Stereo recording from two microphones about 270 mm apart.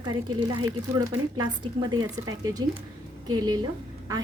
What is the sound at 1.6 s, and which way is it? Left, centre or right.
A woman's voice, centre.